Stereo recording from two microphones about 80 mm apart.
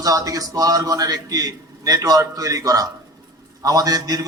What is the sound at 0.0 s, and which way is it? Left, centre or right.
A man's voice, right.